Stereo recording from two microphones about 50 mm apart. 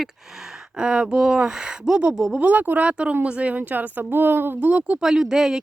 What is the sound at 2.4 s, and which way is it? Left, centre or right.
A woman's voice, right.